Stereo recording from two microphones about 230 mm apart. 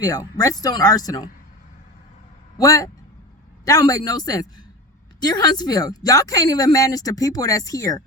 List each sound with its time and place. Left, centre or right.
0.0 s a woman's voice: centre
2.6 s a woman's voice: centre